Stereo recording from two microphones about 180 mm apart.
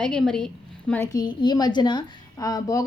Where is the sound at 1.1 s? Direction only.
25° left (ahead or behind).